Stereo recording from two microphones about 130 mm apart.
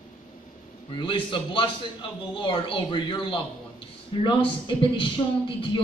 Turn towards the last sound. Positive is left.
turn(degrees=40)  # may be behind; listen again after turning